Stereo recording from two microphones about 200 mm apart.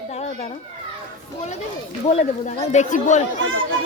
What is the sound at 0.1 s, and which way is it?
Children playing, 35° left (ahead or behind).